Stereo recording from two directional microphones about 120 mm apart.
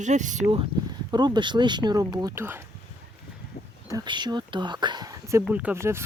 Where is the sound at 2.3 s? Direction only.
20° right (ahead or behind).